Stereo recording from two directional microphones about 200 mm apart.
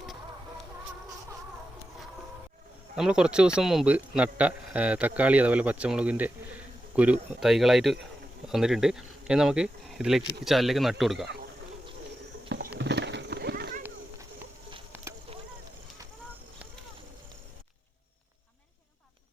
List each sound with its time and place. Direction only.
2.9 s a man's voice: 5° right (ahead or behind)
12.8 s horse: 60° right (ahead or behind)